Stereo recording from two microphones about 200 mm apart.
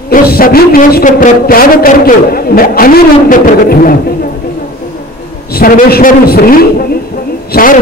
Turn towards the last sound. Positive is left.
turn(degrees=45)  # may be behind; listen again after turning